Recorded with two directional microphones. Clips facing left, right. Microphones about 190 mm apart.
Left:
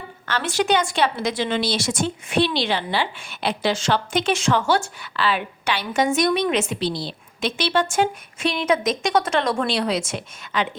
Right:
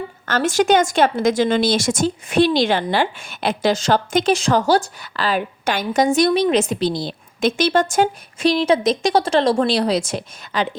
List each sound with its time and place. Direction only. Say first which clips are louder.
0.3 s speech: right 5 dB; 45° right (ahead or behind)